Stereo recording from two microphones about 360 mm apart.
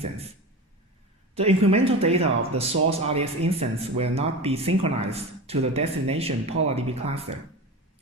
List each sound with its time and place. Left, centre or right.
0.0 s speech: centre
1.4 s speech: centre